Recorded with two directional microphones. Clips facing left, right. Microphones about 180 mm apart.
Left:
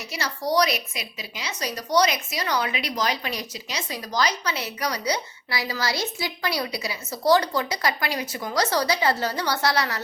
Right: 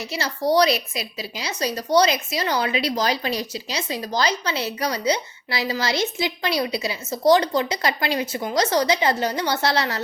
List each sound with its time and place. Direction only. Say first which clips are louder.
0.1 s a woman's voice: right 4 dB; 30° right (ahead or behind)